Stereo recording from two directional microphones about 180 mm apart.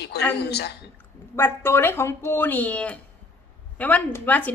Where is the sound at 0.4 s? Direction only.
65° left (ahead or behind).